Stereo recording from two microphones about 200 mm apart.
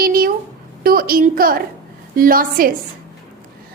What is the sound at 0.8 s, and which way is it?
A woman's voice, 45° right (ahead or behind).